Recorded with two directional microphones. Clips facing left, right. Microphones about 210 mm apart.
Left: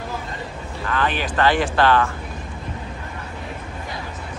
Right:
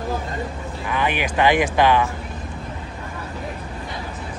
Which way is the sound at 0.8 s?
15° right (ahead or behind).